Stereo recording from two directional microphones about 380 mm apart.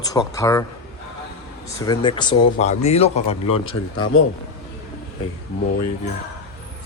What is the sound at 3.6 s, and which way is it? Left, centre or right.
Speech, left.